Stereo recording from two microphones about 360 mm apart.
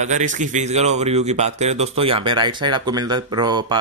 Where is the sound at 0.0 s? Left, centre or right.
Centre.